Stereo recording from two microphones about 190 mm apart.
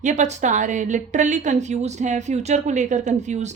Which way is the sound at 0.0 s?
40° right (ahead or behind).